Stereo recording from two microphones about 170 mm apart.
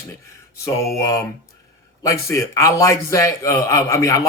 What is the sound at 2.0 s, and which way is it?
A man's voice, 20° left (ahead or behind).